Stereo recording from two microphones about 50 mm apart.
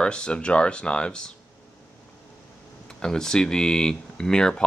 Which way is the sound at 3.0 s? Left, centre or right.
Centre.